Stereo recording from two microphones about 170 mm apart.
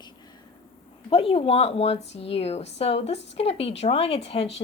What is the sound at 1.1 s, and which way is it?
A woman's voice, 30° left (ahead or behind).